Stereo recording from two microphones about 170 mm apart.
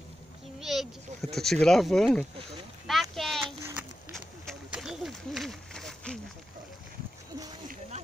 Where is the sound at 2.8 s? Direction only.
Centre (ahead or behind).